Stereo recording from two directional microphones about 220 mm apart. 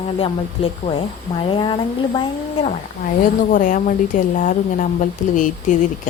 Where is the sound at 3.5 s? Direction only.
35° left (ahead or behind).